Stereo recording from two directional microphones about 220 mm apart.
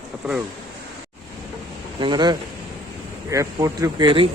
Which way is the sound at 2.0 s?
20° right (ahead or behind).